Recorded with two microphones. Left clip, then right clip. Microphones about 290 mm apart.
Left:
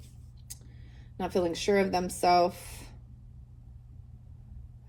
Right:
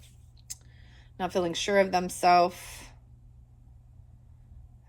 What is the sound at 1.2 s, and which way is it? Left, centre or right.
Speech, right.